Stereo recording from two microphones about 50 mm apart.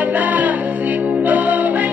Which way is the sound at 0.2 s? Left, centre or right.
Right.